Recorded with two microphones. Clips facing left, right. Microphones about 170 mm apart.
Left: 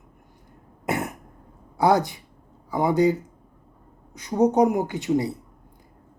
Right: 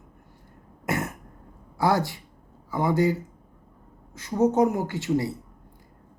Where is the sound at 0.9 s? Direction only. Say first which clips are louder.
Left 1 dB; 15° left (ahead or behind).